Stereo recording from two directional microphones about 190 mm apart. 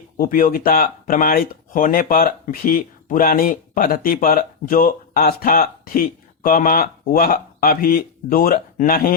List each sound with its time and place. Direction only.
0.2 s speech: 45° left (ahead or behind)